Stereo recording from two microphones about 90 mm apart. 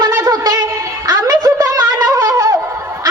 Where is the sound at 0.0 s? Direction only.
45° right (ahead or behind).